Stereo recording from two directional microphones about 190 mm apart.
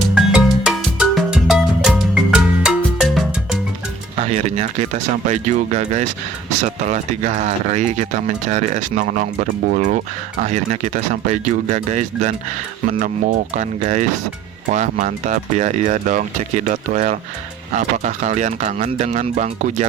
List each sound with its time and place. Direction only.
0.1 s music: 5° right (ahead or behind)
4.2 s speech: 35° right (ahead or behind)